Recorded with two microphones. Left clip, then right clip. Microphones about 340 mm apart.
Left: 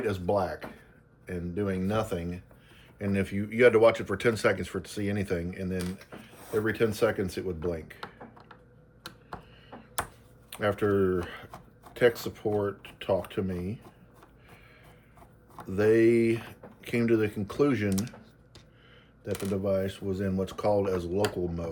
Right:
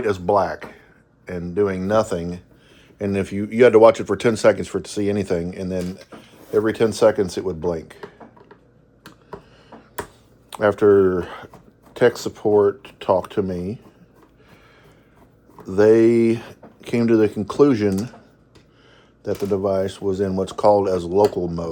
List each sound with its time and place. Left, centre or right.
0.0 s speech: centre
10.5 s speech: centre
15.6 s speech: centre
19.2 s speech: centre